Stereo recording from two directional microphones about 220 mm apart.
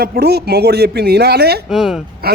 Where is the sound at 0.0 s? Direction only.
45° right (ahead or behind).